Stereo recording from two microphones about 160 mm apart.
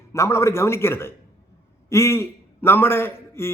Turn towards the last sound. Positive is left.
turn(degrees=15)  # may be behind; listen again after turning